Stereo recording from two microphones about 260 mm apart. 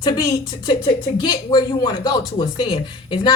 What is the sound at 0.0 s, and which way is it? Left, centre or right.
Speech, centre.